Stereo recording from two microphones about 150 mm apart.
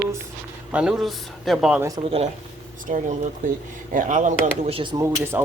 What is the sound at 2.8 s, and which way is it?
Speech, 60° right (ahead or behind).